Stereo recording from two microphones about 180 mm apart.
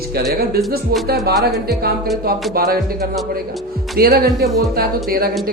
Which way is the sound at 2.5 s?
55° right (ahead or behind).